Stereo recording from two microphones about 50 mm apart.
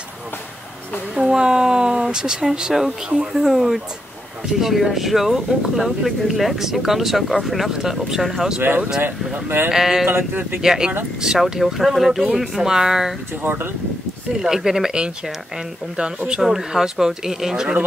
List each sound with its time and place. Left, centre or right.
1.1 s speech: centre
9.7 s speech: centre
10.0 s speech: right
10.6 s speech: centre
13.4 s speech: right
14.4 s speech: centre